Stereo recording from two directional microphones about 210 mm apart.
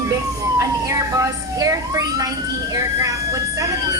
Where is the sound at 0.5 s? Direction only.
15° right (ahead or behind).